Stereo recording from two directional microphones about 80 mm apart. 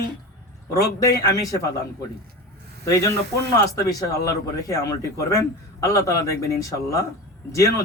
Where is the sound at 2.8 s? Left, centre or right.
Left.